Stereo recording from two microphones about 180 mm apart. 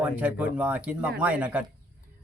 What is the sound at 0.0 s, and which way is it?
Speech, 10° right (ahead or behind).